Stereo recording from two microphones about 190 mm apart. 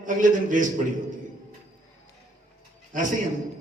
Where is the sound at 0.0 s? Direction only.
45° right (ahead or behind).